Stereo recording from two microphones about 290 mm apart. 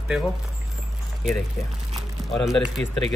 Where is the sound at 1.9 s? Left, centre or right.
Centre.